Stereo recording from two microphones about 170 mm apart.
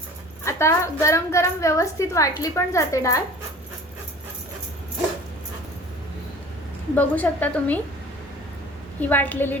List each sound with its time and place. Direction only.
0.4 s a woman's voice: 15° left (ahead or behind)
6.9 s a woman's voice: 10° left (ahead or behind)
9.0 s a woman's voice: 10° left (ahead or behind)